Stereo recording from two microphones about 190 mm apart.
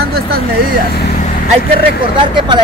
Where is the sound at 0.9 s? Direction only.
55° left (ahead or behind).